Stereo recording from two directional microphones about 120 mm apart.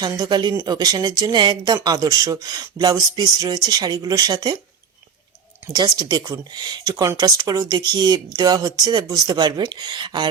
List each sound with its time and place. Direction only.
0.0 s speech: 35° right (ahead or behind)
5.7 s speech: 35° right (ahead or behind)